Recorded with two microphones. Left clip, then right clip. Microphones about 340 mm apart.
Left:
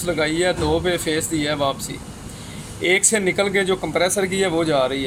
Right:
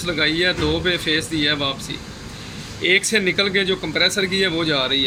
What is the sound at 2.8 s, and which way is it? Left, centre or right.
Speech, centre.